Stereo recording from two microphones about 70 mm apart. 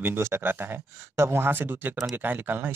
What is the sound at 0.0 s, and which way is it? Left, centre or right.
Speech, right.